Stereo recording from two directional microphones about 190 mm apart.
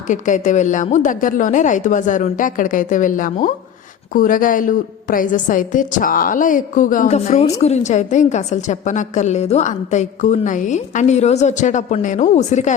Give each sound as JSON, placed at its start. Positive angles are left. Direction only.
{"t": 0.1, "sound": "a woman's voice", "side_deg": 40}